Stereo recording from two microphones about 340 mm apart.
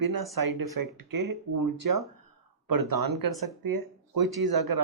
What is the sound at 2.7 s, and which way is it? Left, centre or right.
Speech, right.